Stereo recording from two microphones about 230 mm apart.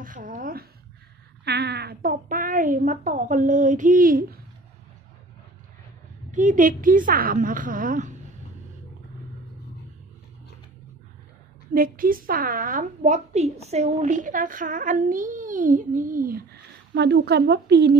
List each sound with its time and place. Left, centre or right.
0.0 s a woman's voice: right
6.3 s a woman's voice: right
11.7 s a woman's voice: right
16.9 s speech: right